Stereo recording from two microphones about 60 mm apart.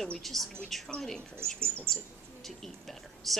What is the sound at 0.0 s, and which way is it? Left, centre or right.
A woman's voice, centre.